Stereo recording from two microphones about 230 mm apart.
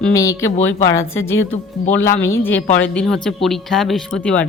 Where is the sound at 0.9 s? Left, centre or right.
Left.